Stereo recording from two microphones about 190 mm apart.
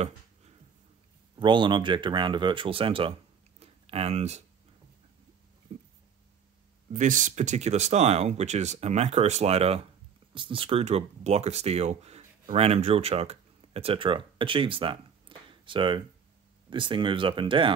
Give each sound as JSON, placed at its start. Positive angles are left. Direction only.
{"t": 1.4, "sound": "speech", "side_deg": -25}
{"t": 6.9, "sound": "speech", "side_deg": -40}